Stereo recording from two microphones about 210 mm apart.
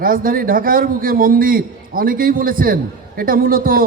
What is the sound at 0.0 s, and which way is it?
A man's voice, 40° right (ahead or behind).